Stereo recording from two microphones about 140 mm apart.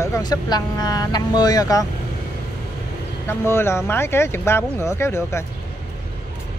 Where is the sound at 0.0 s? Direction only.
25° left (ahead or behind).